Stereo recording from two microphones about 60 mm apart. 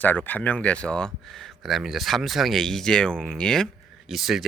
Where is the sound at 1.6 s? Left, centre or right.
Centre.